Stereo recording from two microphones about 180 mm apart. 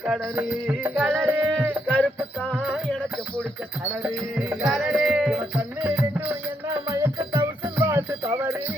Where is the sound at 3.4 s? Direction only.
10° right (ahead or behind).